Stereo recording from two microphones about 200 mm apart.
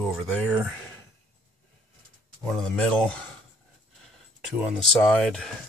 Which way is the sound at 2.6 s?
5° left (ahead or behind).